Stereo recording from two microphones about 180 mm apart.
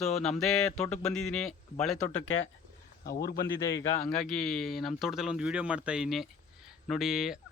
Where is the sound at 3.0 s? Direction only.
60° left (ahead or behind).